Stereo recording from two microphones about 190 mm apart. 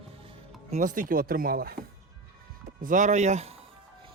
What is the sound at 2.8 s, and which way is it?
Speech, 40° right (ahead or behind).